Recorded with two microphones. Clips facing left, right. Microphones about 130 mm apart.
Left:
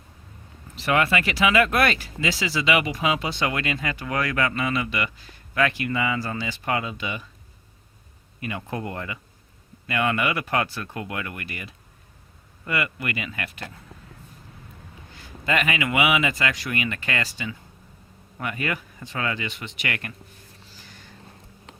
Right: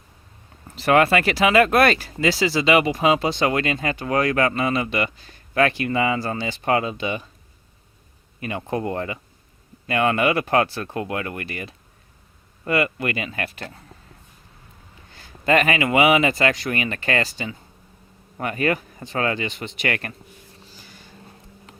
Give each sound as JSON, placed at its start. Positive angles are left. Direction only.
{"t": 0.8, "sound": "speech", "side_deg": -40}
{"t": 8.4, "sound": "speech", "side_deg": -30}
{"t": 15.4, "sound": "speech", "side_deg": -40}